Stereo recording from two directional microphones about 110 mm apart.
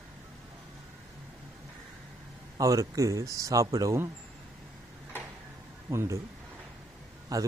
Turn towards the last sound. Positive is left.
turn(degrees=-35)  # may be behind; listen again after turning